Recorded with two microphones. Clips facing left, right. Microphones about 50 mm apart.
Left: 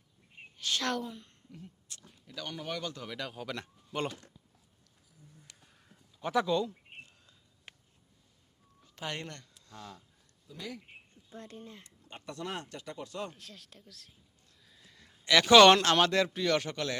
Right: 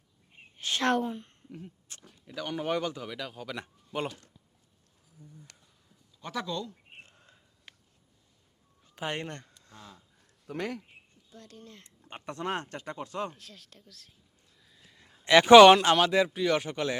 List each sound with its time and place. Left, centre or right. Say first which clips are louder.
0.5 s a sound: right 6 dB; right
2.2 s speech: right 6 dB; centre
2.6 s speech: right 8 dB; right
2.9 s speech: right 2 dB; centre
6.2 s speech: left 6 dB; centre
7.0 s a sound: right 1 dB; right
9.0 s speech: right 5 dB; right
10.4 s speech: right 9 dB; right
11.3 s speech: left 3 dB; left
12.0 s speech: right 6 dB; right
13.3 s speech: even; centre
14.8 s a sound: even; centre
15.1 s speech: right 6 dB; right
15.6 s speech: right 4 dB; centre